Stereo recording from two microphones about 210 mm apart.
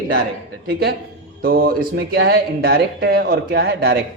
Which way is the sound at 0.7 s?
50° right (ahead or behind).